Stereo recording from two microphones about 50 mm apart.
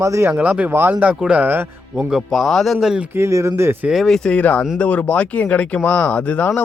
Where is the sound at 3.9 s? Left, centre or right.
Centre.